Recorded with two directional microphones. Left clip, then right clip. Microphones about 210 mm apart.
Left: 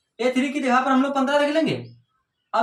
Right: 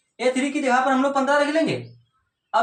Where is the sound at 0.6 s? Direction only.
20° left (ahead or behind).